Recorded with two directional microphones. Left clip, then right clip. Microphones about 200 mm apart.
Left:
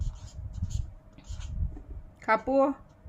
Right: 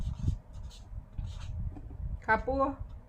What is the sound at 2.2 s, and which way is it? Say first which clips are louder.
Speech: left 4 dB; 55° left (ahead or behind).